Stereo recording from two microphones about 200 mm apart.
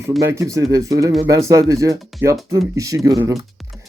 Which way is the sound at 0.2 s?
15° right (ahead or behind).